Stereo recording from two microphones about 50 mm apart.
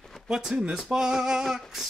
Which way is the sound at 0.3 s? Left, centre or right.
Centre.